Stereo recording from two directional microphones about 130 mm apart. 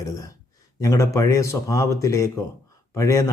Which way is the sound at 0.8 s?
25° left (ahead or behind).